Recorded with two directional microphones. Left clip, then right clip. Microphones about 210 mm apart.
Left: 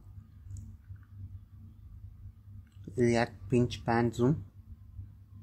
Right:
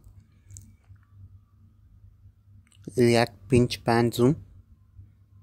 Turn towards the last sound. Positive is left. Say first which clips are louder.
# right 7 dB
turn(degrees=-40)  # may be behind; listen again after turning